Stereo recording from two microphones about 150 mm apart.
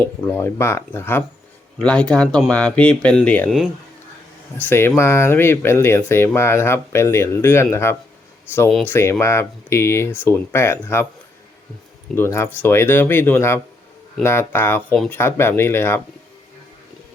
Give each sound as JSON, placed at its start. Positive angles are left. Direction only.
{"t": 0.0, "sound": "speech", "side_deg": 15}
{"t": 4.5, "sound": "speech", "side_deg": 15}
{"t": 12.1, "sound": "speech", "side_deg": 15}
{"t": 14.9, "sound": "speech", "side_deg": 0}
{"t": 15.2, "sound": "speech", "side_deg": 15}